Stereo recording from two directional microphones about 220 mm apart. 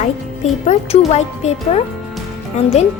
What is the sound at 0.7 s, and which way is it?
Speech, 30° left (ahead or behind).